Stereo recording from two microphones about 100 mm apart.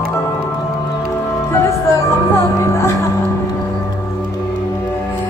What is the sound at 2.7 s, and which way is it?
Music, 25° left (ahead or behind).